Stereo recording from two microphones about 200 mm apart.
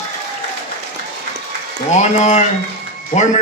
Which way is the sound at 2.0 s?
35° left (ahead or behind).